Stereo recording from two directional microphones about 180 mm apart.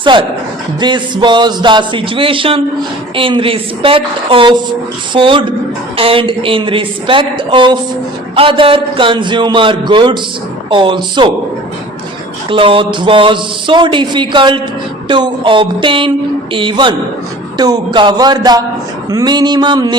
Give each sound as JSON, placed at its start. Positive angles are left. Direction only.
{"t": 0.0, "sound": "speech", "side_deg": -25}
{"t": 12.5, "sound": "speech", "side_deg": -30}